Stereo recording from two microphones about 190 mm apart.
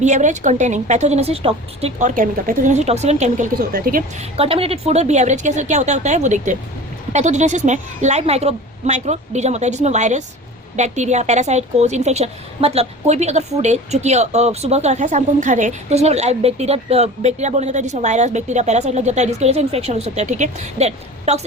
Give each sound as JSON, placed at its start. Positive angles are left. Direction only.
{"t": 0.0, "sound": "a woman's voice", "side_deg": -40}
{"t": 4.2, "sound": "a woman's voice", "side_deg": -30}